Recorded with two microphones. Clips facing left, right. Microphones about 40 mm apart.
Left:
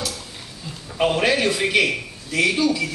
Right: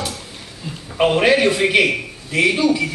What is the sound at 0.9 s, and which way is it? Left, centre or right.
A man's voice, centre.